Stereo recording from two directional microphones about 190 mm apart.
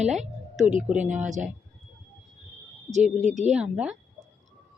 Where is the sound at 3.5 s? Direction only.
5° right (ahead or behind).